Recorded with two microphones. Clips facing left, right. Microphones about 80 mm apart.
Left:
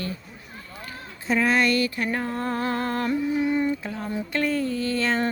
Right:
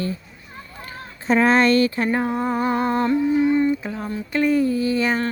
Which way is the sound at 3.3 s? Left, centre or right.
Centre.